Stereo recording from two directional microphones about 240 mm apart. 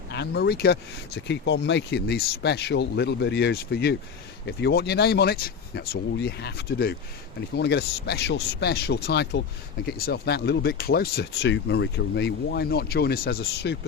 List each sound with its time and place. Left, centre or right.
0.1 s speech: left